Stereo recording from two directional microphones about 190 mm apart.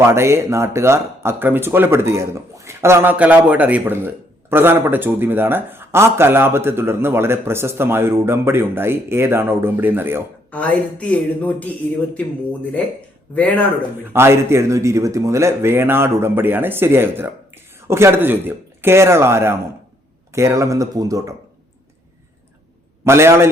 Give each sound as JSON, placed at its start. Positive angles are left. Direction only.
{"t": 0.0, "sound": "speech", "side_deg": -15}
{"t": 10.5, "sound": "a woman's voice", "side_deg": 5}
{"t": 13.3, "sound": "a woman's voice", "side_deg": 5}
{"t": 14.0, "sound": "speech", "side_deg": -10}
{"t": 23.0, "sound": "speech", "side_deg": -15}